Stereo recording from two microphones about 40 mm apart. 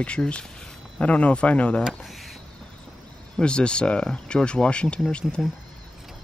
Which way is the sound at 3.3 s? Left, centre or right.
Left.